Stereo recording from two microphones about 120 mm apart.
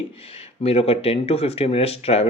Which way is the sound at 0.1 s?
55° left (ahead or behind).